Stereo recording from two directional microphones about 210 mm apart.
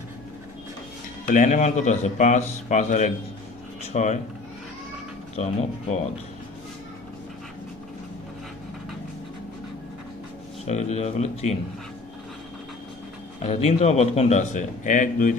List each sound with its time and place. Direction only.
1.2 s a man's voice: 35° left (ahead or behind)
5.3 s a man's voice: 30° left (ahead or behind)
10.6 s a man's voice: 30° left (ahead or behind)
13.4 s a man's voice: 30° left (ahead or behind)